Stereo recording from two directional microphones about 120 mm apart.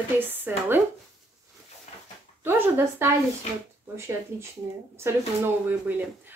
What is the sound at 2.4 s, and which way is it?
Speech, 20° right (ahead or behind).